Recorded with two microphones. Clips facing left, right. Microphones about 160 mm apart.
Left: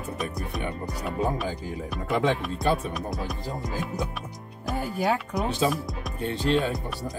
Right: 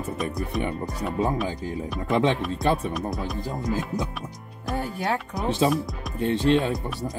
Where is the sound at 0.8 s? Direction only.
20° right (ahead or behind).